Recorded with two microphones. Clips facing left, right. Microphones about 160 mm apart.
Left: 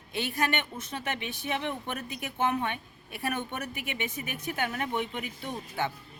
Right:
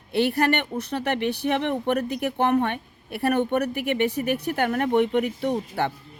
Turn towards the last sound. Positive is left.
turn(degrees=-65)  # may be behind; listen again after turning